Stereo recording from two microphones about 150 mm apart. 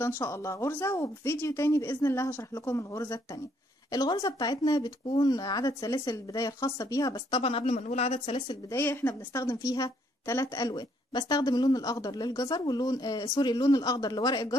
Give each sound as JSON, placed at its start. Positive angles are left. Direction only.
{"t": 0.0, "sound": "a woman's voice", "side_deg": 15}
{"t": 8.7, "sound": "a woman's voice", "side_deg": 15}